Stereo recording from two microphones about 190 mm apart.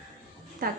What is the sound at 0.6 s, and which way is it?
Speech, 50° right (ahead or behind).